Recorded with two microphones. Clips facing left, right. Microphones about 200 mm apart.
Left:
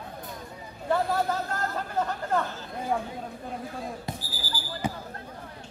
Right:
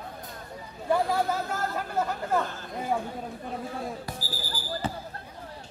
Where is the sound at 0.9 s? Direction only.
10° right (ahead or behind).